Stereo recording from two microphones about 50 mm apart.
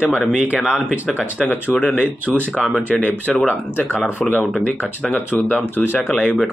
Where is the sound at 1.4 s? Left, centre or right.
Left.